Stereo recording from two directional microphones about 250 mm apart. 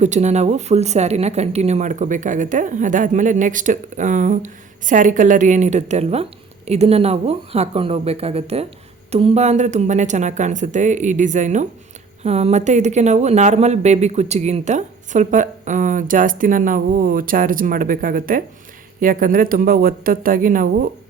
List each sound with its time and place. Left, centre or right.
0.0 s speech: right